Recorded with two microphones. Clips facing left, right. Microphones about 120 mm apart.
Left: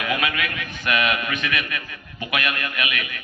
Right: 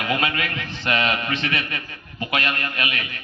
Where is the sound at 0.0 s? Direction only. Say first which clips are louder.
Right 1 dB; 30° right (ahead or behind).